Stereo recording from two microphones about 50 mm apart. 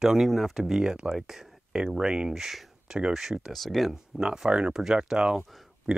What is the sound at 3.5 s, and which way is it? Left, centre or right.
Speech, centre.